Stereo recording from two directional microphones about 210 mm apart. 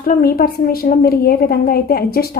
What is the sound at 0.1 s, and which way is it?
A woman's voice, 45° left (ahead or behind).